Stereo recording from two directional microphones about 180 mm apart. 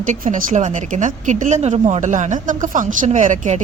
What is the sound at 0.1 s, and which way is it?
Speech, 45° right (ahead or behind).